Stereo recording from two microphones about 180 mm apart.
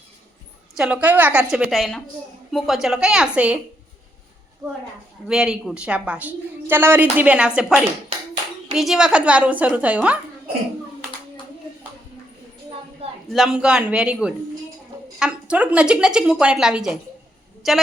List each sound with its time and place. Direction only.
0.8 s a woman's voice: 5° right (ahead or behind)
5.3 s speech: 5° right (ahead or behind)
13.3 s a woman's voice: 5° right (ahead or behind)